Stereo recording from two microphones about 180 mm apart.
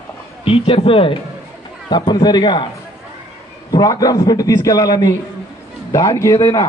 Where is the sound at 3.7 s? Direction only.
20° left (ahead or behind).